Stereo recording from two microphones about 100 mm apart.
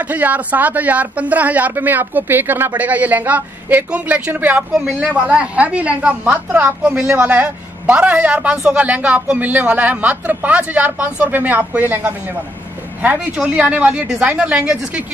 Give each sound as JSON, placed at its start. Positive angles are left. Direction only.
{"t": 0.1, "sound": "a man's voice", "side_deg": -15}